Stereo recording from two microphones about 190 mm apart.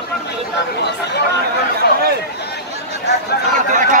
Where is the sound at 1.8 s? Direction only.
60° left (ahead or behind).